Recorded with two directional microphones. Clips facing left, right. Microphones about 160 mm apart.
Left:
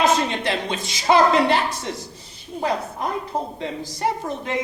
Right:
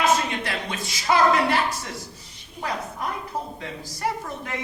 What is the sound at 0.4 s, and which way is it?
A man's voice, 25° left (ahead or behind).